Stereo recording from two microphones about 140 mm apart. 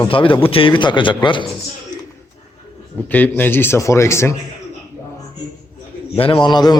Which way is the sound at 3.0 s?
10° left (ahead or behind).